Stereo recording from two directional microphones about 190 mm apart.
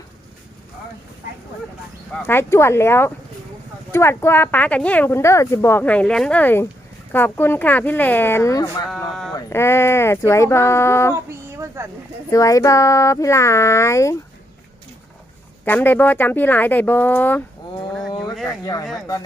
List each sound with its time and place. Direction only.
2.1 s speech: 10° left (ahead or behind)
11.1 s a sound: 15° right (ahead or behind)
12.3 s speech: 15° left (ahead or behind)
15.6 s speech: 10° left (ahead or behind)
18.6 s speech: 20° left (ahead or behind)